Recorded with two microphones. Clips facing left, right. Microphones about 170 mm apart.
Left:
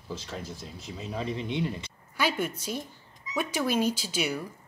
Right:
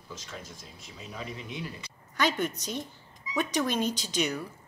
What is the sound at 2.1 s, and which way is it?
A woman's voice, 10° left (ahead or behind).